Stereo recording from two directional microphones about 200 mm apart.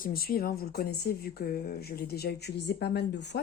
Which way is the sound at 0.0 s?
50° left (ahead or behind).